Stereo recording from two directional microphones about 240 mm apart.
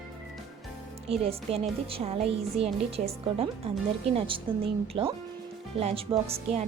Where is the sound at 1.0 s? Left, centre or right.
Right.